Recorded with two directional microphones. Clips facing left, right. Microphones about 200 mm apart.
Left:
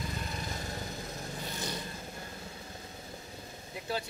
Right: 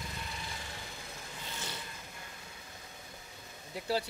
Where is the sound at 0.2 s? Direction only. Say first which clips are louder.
Left 5 dB; 45° left (ahead or behind).